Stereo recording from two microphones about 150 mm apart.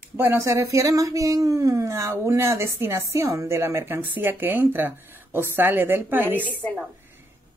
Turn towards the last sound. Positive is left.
turn(degrees=10)  # may be behind; listen again after turning